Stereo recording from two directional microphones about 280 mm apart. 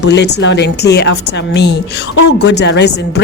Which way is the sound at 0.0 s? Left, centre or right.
Left.